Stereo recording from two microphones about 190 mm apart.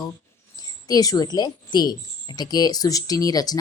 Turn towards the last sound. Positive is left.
turn(degrees=20)  # may be behind; listen again after turning